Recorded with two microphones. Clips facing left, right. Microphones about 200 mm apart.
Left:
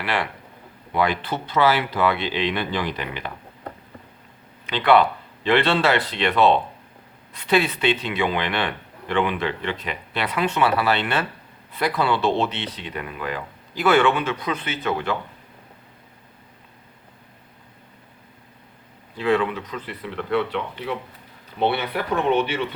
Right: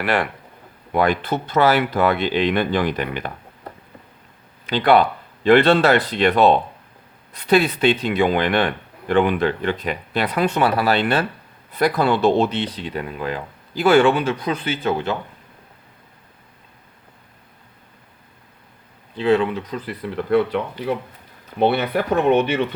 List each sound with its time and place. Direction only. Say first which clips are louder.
0.0 s speech: right 5 dB; 45° right (ahead or behind)
4.6 s speech: right 2 dB; 35° right (ahead or behind)
19.1 s speech: right 3 dB; 25° right (ahead or behind); by 22.6 s 45° right (ahead or behind)